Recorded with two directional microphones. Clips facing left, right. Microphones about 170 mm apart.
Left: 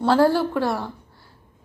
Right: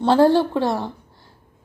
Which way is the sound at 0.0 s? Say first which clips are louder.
Right 3 dB; 20° right (ahead or behind).